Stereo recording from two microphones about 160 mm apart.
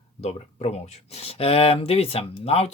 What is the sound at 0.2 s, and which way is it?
Speech, 40° left (ahead or behind).